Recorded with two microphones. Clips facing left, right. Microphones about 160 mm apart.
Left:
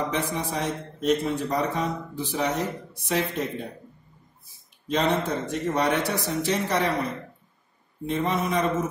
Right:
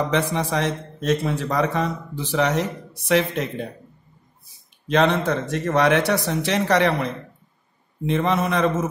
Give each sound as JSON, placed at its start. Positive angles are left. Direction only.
{"t": 0.1, "sound": "a man's voice", "side_deg": -85}
{"t": 4.8, "sound": "a man's voice", "side_deg": -85}
{"t": 8.1, "sound": "a man's voice", "side_deg": -80}